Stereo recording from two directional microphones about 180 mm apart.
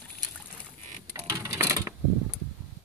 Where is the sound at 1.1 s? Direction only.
15° right (ahead or behind).